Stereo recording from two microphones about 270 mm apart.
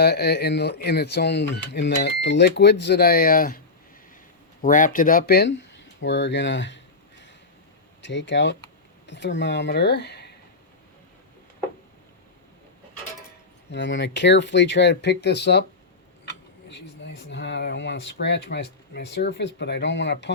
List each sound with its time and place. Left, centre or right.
0.0 s speech: left
4.6 s speech: left
8.0 s speech: left
13.7 s speech: left
16.6 s speech: left